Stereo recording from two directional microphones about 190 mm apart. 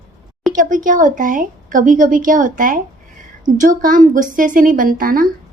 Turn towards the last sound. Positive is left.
turn(degrees=-45)  # may be behind; listen again after turning